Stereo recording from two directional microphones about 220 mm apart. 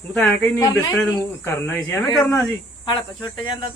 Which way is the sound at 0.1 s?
5° left (ahead or behind).